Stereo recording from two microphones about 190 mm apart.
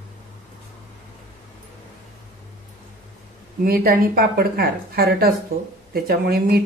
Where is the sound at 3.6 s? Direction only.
50° right (ahead or behind).